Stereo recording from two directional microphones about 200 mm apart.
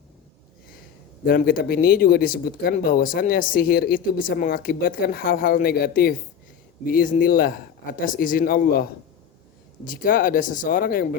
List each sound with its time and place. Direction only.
1.2 s speech: 50° left (ahead or behind)
9.8 s speech: 45° left (ahead or behind)